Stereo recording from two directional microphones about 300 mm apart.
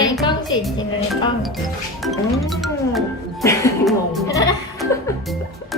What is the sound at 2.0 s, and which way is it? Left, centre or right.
Music, centre.